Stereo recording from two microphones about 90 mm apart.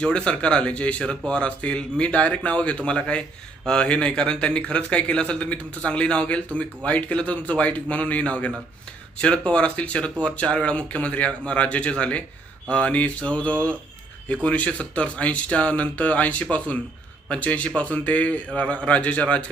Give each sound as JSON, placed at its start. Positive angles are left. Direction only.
{"t": 0.0, "sound": "a man's voice", "side_deg": 10}